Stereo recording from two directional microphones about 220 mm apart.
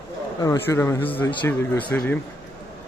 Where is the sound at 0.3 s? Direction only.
15° left (ahead or behind).